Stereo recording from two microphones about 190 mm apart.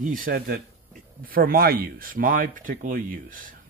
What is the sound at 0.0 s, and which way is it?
Speech, 45° right (ahead or behind).